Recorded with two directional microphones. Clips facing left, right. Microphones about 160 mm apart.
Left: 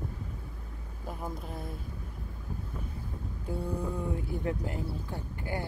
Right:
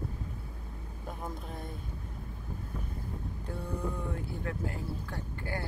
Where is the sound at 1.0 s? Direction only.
Centre (ahead or behind).